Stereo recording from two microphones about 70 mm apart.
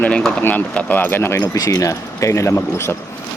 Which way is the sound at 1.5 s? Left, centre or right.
Left.